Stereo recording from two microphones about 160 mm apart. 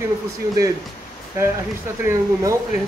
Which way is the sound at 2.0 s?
20° right (ahead or behind).